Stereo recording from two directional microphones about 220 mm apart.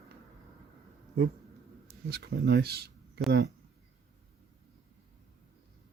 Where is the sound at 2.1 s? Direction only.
45° right (ahead or behind).